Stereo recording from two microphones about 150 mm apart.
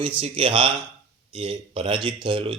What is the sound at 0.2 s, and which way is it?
Speech, 35° right (ahead or behind).